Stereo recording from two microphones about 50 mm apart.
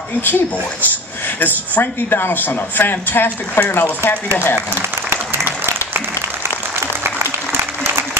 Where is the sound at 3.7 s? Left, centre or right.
Left.